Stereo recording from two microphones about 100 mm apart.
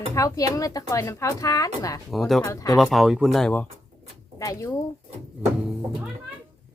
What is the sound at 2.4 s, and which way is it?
Speech, 30° left (ahead or behind).